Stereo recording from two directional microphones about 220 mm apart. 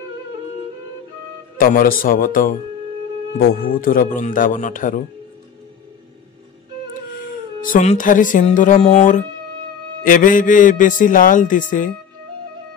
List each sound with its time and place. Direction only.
1.6 s a man's voice: 40° left (ahead or behind)
3.5 s a man's voice: 40° left (ahead or behind)
7.6 s a man's voice: 35° left (ahead or behind)